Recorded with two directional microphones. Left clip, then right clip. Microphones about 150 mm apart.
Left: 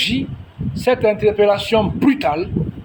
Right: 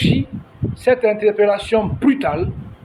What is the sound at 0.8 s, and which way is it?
A man's voice, 45° left (ahead or behind).